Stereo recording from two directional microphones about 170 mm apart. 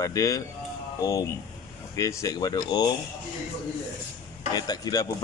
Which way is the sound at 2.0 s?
20° left (ahead or behind).